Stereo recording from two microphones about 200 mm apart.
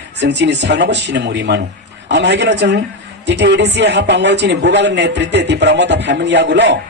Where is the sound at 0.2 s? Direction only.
60° right (ahead or behind).